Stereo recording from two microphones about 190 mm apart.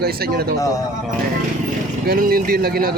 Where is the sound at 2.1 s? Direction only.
50° right (ahead or behind).